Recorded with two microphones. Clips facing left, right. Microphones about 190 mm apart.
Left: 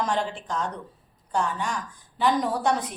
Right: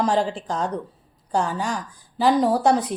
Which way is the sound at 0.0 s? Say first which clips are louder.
Right 6 dB; 35° right (ahead or behind).